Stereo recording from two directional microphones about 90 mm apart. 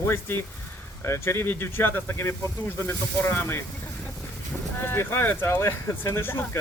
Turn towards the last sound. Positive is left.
turn(degrees=25)  # may be behind; listen again after turning